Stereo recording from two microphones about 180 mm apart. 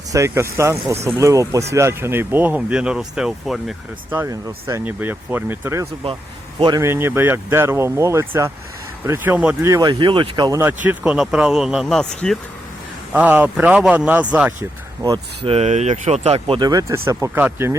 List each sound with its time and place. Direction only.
0.1 s speech: 15° right (ahead or behind)
4.2 s speech: 15° right (ahead or behind)
9.6 s speech: 20° right (ahead or behind)
10.8 s speech: 5° right (ahead or behind)
13.1 s speech: 10° right (ahead or behind)
15.4 s speech: 35° right (ahead or behind); by 17.7 s 10° right (ahead or behind)